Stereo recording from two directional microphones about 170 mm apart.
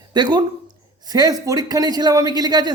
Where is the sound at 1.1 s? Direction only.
25° right (ahead or behind).